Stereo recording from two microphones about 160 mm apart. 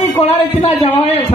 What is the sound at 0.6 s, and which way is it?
Speech, 35° left (ahead or behind).